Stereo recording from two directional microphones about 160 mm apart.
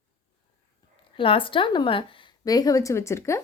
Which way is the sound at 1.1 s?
30° left (ahead or behind).